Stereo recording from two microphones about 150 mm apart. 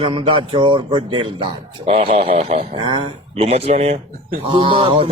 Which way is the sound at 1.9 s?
50° right (ahead or behind).